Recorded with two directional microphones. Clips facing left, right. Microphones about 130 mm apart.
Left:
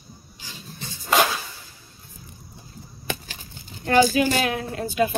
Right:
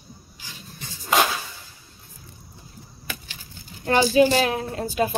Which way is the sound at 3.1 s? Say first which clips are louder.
Left 6 dB; 25° left (ahead or behind).